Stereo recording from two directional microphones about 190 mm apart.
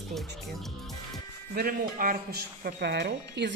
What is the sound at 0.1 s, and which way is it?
Speech, centre (ahead or behind).